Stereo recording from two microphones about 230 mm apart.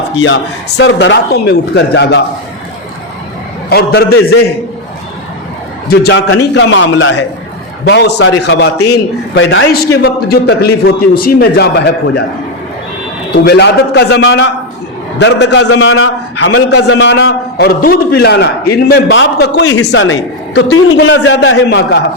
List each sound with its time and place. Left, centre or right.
0.2 s a man's voice: left
3.7 s a man's voice: left
5.9 s a man's voice: left
6.2 s a man's voice: left
13.3 s a man's voice: left
15.7 s a man's voice: left